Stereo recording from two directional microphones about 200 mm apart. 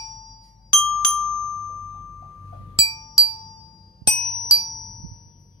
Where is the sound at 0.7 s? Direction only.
Centre (ahead or behind).